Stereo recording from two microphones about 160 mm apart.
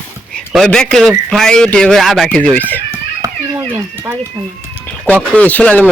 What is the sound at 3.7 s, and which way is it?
Speech, 15° right (ahead or behind).